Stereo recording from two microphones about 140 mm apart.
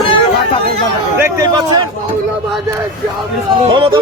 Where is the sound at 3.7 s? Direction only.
35° right (ahead or behind).